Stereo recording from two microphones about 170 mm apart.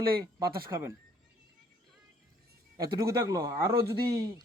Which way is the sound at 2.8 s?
20° right (ahead or behind).